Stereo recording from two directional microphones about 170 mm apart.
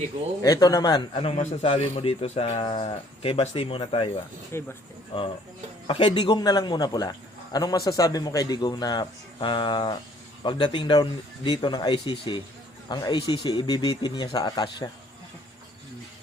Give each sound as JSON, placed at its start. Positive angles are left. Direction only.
{"t": 0.4, "sound": "speech", "side_deg": 20}
{"t": 4.5, "sound": "speech", "side_deg": 15}
{"t": 5.1, "sound": "speech", "side_deg": 35}